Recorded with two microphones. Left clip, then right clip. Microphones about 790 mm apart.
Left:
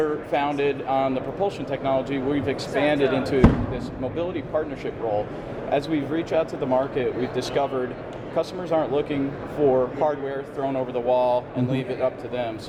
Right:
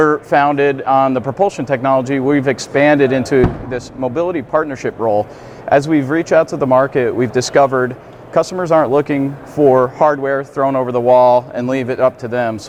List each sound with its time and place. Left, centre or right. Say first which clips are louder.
0.0 s speech: right 12 dB; right